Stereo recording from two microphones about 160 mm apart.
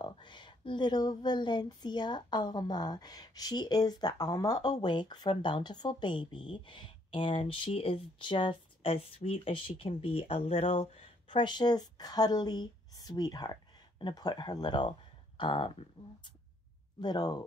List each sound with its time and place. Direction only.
0.0 s speech: 30° left (ahead or behind)
17.0 s speech: 25° left (ahead or behind)